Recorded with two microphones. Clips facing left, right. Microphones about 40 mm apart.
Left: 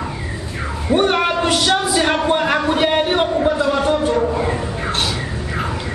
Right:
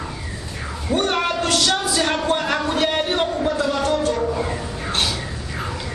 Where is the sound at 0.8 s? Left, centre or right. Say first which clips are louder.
Left 5 dB; left.